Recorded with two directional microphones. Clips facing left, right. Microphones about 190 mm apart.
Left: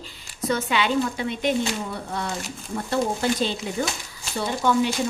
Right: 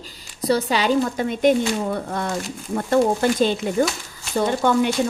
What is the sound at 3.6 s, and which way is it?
Speech, 50° right (ahead or behind).